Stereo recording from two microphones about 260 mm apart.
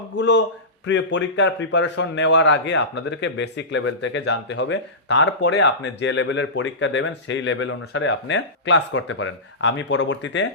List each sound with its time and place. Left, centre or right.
0.2 s a man's voice: left